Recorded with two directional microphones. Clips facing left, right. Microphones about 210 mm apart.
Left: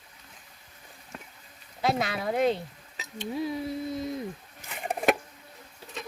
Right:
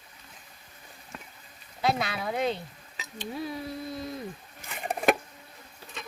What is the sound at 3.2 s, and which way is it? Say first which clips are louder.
Speech: left 4 dB; 20° left (ahead or behind).